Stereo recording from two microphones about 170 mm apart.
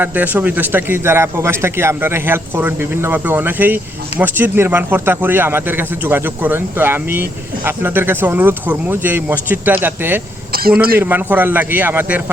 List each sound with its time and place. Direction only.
0.0 s speech: 10° right (ahead or behind)
10.5 s a man's voice: 60° right (ahead or behind)
11.0 s speech: 10° right (ahead or behind)